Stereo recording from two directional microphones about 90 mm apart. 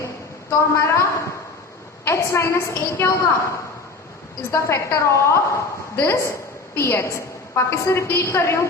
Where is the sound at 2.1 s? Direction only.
30° left (ahead or behind).